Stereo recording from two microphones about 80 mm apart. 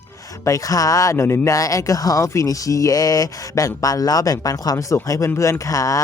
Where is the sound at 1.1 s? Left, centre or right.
Left.